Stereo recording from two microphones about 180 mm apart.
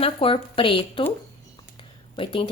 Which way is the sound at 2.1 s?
30° left (ahead or behind).